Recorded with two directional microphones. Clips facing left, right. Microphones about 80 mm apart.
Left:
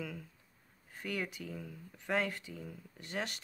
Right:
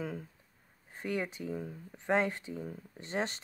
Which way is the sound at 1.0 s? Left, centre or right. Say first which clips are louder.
Right 4 dB; right.